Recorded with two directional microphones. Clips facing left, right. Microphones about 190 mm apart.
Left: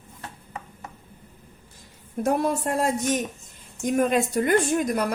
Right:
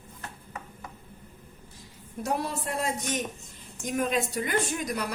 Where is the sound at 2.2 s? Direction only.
50° left (ahead or behind).